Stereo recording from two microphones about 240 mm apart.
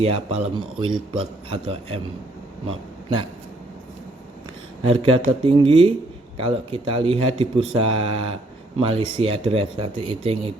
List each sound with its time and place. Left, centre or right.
0.0 s speech: right
4.8 s speech: right